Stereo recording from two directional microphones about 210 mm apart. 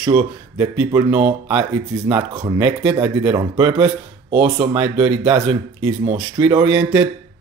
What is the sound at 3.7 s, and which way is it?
Speech, 25° right (ahead or behind).